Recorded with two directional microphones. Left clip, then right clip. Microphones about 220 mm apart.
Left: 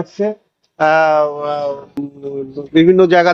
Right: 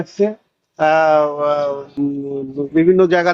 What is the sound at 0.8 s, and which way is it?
Speech, 25° left (ahead or behind).